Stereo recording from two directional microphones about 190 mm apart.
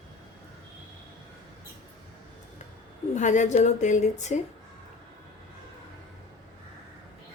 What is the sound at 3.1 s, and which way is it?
A woman's voice, 40° left (ahead or behind).